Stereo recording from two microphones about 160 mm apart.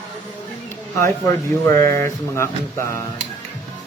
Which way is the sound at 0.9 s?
20° left (ahead or behind).